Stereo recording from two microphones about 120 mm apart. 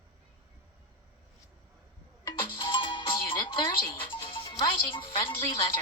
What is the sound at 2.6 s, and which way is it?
Music, 45° left (ahead or behind).